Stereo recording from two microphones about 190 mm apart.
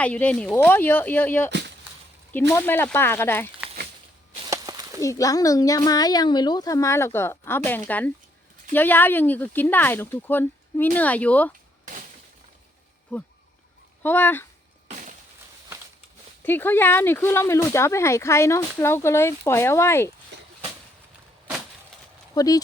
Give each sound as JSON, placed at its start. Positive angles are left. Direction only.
{"t": 0.0, "sound": "speech", "side_deg": 5}
{"t": 1.5, "sound": "a sound", "side_deg": -65}
{"t": 2.5, "sound": "speech", "side_deg": 10}
{"t": 4.4, "sound": "a sound", "side_deg": -20}
{"t": 4.9, "sound": "speech", "side_deg": 15}
{"t": 14.0, "sound": "speech", "side_deg": 10}
{"t": 16.4, "sound": "speech", "side_deg": 10}
{"t": 22.4, "sound": "speech", "side_deg": 20}